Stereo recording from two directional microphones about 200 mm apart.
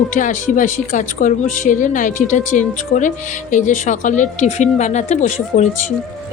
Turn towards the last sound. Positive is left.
turn(degrees=35)  # may be behind; listen again after turning